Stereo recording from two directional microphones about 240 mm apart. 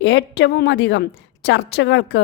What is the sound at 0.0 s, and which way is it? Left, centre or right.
A woman's voice, left.